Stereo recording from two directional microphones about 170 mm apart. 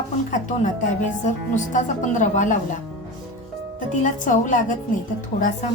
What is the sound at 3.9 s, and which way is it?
Speech, 45° left (ahead or behind).